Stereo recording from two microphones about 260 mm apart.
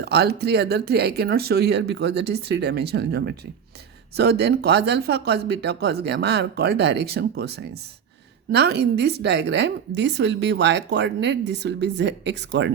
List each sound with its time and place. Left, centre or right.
0.0 s a woman's voice: right